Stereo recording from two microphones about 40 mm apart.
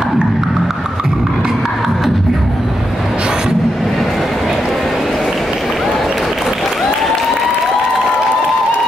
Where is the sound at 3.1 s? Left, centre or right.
Right.